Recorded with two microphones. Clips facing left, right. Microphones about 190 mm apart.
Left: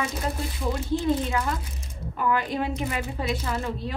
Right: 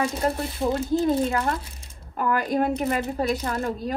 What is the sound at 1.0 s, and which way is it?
A woman's voice, 55° right (ahead or behind).